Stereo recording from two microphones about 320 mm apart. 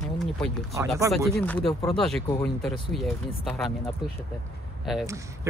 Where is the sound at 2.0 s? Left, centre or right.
Centre.